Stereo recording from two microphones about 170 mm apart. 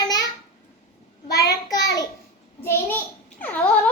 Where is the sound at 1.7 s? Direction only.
20° left (ahead or behind).